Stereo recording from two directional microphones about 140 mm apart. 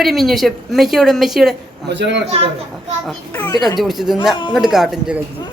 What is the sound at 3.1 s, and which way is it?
Speech, 10° left (ahead or behind).